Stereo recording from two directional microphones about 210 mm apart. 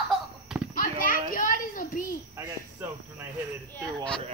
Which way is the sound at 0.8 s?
40° left (ahead or behind).